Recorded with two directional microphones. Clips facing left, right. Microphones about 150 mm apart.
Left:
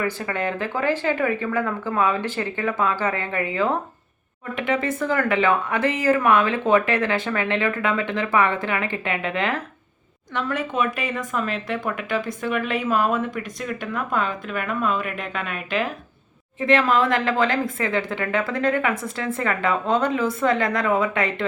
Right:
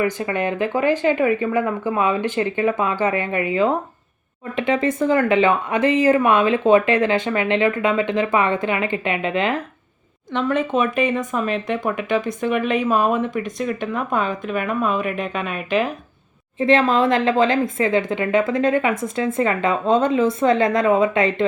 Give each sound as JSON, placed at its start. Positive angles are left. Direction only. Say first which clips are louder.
{"t": 0.0, "sound": "speech", "louder": "right 4 dB", "side_deg": -20}